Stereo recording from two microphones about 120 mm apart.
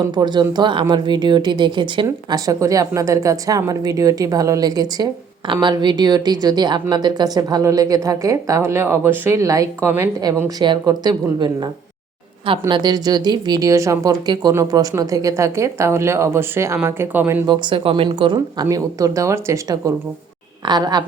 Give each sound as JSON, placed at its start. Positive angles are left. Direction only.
{"t": 0.1, "sound": "speech", "side_deg": -35}
{"t": 17.4, "sound": "speech", "side_deg": -40}
{"t": 18.6, "sound": "speech", "side_deg": -30}